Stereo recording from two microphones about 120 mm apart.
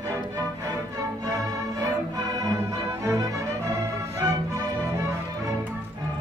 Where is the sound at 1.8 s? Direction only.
30° right (ahead or behind).